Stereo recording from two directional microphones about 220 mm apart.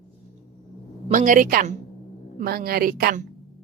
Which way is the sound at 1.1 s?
35° right (ahead or behind).